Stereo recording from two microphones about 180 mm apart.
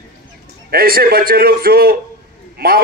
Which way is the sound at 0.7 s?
55° right (ahead or behind).